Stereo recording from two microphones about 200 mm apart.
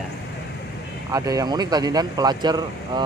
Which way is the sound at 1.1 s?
15° right (ahead or behind).